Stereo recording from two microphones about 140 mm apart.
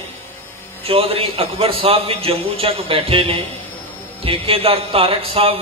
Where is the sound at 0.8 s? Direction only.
40° right (ahead or behind).